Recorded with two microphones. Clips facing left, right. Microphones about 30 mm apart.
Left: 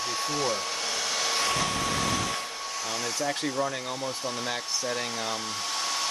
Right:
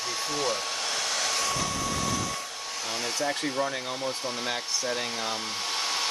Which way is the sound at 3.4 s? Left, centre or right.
Right.